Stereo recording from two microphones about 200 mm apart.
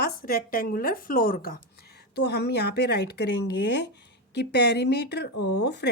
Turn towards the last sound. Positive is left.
turn(degrees=55)  # may be behind; listen again after turning